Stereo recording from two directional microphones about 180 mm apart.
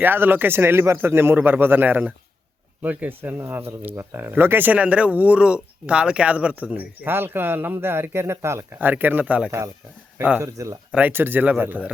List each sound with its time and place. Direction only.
0.0 s speech: 10° right (ahead or behind)